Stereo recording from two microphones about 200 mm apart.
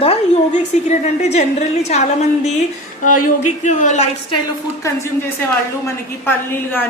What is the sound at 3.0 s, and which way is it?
A woman's voice, 40° left (ahead or behind).